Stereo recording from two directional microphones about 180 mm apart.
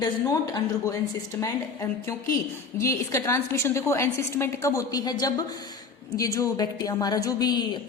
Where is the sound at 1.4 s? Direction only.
15° left (ahead or behind).